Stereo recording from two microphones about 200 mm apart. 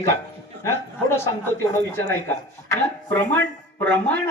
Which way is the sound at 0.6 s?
15° left (ahead or behind).